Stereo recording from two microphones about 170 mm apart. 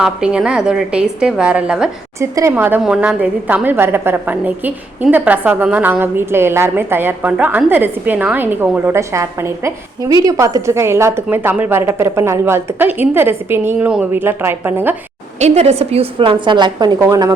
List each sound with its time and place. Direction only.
0.0 s a woman's voice: 5° right (ahead or behind)
2.2 s a woman's voice: 15° right (ahead or behind)
15.4 s a woman's voice: 40° right (ahead or behind); by 17.3 s 20° right (ahead or behind)